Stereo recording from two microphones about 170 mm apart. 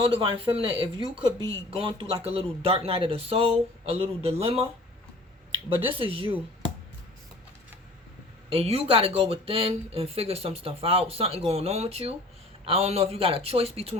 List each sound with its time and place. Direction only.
0.1 s speech: 30° right (ahead or behind)
8.4 s speech: 35° right (ahead or behind)